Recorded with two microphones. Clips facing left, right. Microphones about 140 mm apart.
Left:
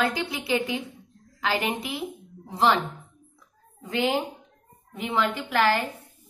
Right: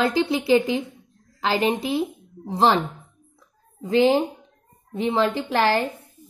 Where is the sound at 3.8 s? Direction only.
30° right (ahead or behind).